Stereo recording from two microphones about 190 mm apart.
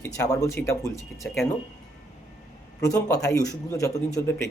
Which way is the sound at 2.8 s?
15° left (ahead or behind).